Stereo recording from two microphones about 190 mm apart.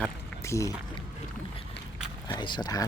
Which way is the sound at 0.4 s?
15° left (ahead or behind).